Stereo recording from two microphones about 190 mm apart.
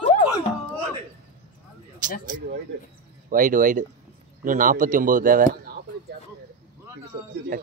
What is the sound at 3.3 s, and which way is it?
Speech, 45° right (ahead or behind).